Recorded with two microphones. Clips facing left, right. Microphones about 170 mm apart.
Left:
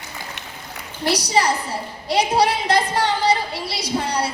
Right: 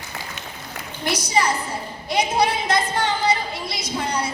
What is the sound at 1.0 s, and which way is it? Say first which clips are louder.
A woman's voice: left 2 dB; 35° left (ahead or behind).